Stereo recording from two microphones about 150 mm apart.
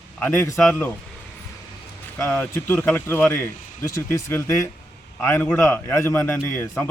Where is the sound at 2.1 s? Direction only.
15° left (ahead or behind).